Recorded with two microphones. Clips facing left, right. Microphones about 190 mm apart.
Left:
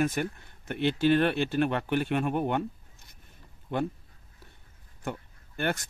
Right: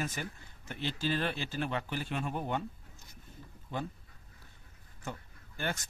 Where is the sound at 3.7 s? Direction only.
65° left (ahead or behind).